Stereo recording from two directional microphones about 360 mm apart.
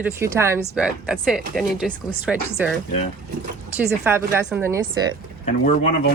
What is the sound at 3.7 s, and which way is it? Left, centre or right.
Speech, centre.